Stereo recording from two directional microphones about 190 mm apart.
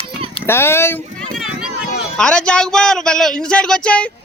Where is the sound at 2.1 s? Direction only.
5° left (ahead or behind).